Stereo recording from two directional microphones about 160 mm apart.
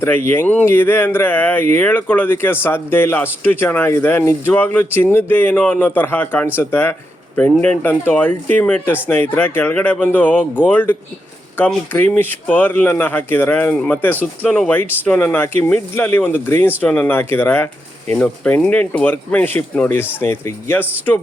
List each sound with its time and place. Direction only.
0.0 s speech: 15° left (ahead or behind)